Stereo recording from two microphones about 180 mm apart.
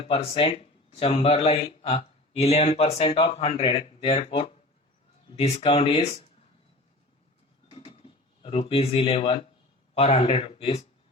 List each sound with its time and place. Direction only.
0.1 s speech: 30° left (ahead or behind)
7.7 s a sound: 35° left (ahead or behind)
9.9 s speech: 35° left (ahead or behind)